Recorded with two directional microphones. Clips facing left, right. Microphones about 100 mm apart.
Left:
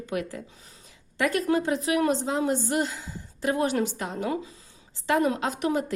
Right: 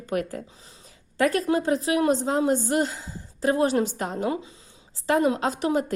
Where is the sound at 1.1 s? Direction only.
35° right (ahead or behind).